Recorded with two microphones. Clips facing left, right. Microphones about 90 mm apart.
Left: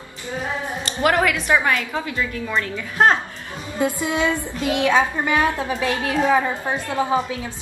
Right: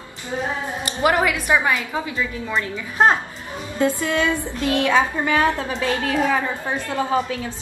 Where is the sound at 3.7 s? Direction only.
15° left (ahead or behind).